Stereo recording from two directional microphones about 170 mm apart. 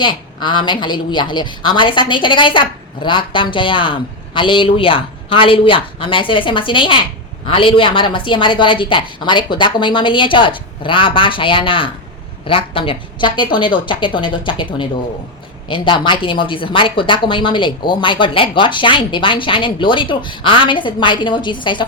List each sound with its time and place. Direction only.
0.0 s speech: 25° left (ahead or behind)